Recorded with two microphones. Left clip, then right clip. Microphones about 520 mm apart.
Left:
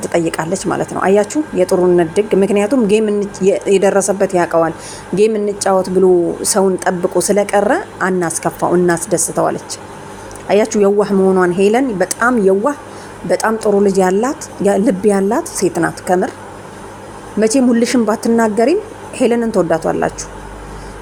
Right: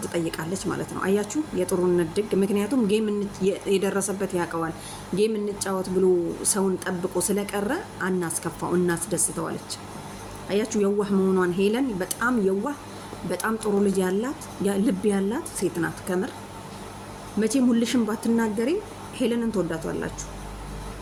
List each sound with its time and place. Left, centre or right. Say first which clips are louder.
0.0 s speech: left 12 dB; right
17.4 s speech: left 11 dB; right